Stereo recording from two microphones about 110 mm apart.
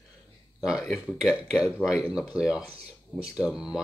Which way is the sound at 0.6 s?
5° right (ahead or behind).